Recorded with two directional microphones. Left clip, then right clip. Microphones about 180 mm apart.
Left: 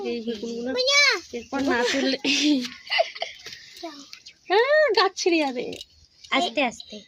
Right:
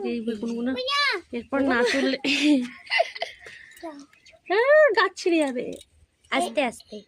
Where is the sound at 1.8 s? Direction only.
10° right (ahead or behind).